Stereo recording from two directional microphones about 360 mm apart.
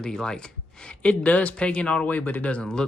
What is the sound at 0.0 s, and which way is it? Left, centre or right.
Speech, centre.